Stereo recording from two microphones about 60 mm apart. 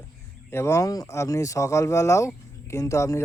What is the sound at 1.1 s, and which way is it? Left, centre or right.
Speech, left.